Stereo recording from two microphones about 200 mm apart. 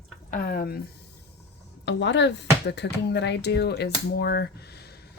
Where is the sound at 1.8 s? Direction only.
60° left (ahead or behind).